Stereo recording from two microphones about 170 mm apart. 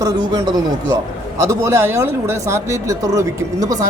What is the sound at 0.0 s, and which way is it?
A man's voice, 25° right (ahead or behind).